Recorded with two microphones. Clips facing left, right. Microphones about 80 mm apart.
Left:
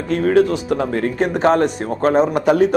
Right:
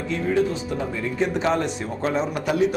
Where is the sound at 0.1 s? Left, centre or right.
Left.